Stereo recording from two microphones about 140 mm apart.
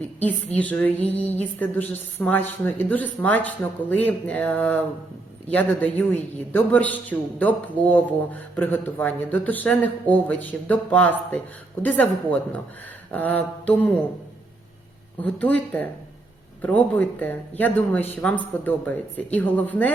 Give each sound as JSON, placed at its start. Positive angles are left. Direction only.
{"t": 0.5, "sound": "a man's voice", "side_deg": 10}
{"t": 15.2, "sound": "a man's voice", "side_deg": 10}